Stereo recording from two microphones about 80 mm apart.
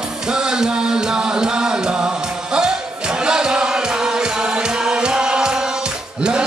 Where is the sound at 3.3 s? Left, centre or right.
Centre.